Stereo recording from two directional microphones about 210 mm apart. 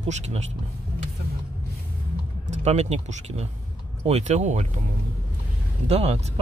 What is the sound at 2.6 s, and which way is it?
A man's voice, 30° right (ahead or behind).